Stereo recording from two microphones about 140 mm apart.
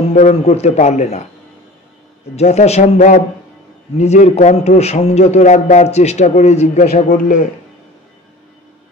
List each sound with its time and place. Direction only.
0.3 s a man's voice: 50° left (ahead or behind)
2.3 s a man's voice: 50° left (ahead or behind)
6.9 s speech: 75° left (ahead or behind)